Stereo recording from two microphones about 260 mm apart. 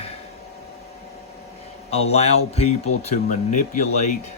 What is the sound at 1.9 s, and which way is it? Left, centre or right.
Speech, left.